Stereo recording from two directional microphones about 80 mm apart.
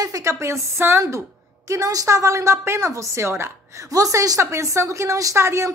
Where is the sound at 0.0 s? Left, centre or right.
Right.